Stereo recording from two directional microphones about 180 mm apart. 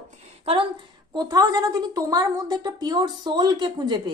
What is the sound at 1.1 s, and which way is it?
A woman's voice, 20° right (ahead or behind).